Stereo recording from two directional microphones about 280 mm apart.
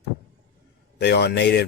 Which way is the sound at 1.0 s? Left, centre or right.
Left.